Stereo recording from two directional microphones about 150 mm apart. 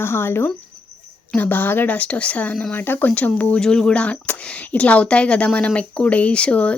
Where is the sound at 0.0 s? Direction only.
15° left (ahead or behind).